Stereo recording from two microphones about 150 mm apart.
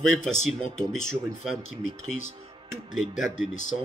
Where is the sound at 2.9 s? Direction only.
Centre (ahead or behind).